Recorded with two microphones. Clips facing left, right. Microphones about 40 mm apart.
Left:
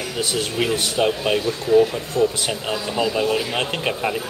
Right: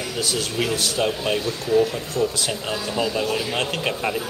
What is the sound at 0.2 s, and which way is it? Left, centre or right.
Speech, left.